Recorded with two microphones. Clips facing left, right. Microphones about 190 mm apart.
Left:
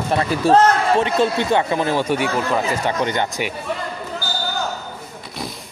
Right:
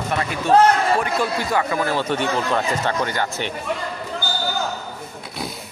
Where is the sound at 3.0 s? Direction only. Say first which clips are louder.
Left 3 dB; 20° left (ahead or behind).